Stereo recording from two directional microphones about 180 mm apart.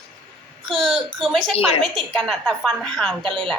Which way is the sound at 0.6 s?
Centre (ahead or behind).